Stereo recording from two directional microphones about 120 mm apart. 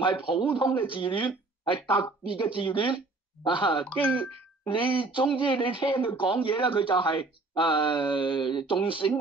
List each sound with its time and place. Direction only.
0.0 s speech: 45° left (ahead or behind)
3.8 s speech: 10° left (ahead or behind)
4.6 s speech: 45° left (ahead or behind)